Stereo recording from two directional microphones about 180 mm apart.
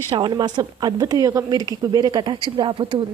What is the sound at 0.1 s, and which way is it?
A woman's voice, 25° right (ahead or behind).